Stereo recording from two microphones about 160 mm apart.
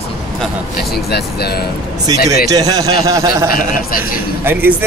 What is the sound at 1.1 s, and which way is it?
Speech, 80° left.